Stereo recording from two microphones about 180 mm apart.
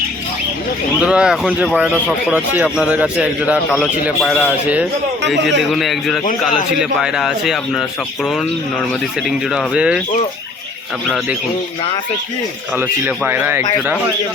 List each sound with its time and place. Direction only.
0.9 s a man's voice: 5° right (ahead or behind)
12.7 s speech: 10° right (ahead or behind)